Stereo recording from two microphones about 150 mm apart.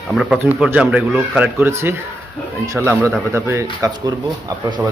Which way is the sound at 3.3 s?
15° right (ahead or behind).